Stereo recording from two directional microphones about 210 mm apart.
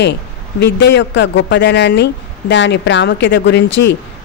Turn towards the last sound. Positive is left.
turn(degrees=55)  # may be behind; listen again after turning